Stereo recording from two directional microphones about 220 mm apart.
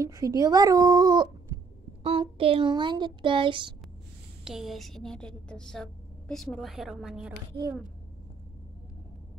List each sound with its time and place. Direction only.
0.0 s speech: 15° right (ahead or behind)
4.5 s a woman's voice: centre (ahead or behind)